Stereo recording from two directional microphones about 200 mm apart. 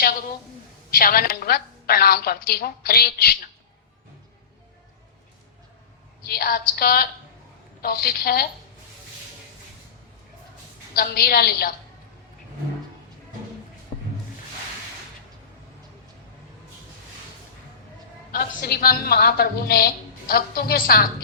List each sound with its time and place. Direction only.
0.9 s a woman's voice: 45° left (ahead or behind)
6.2 s a woman's voice: 50° left (ahead or behind)
10.9 s a woman's voice: 50° left (ahead or behind)
18.3 s a woman's voice: 50° left (ahead or behind)